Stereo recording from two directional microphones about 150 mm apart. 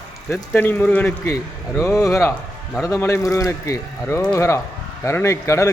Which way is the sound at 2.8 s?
20° left (ahead or behind).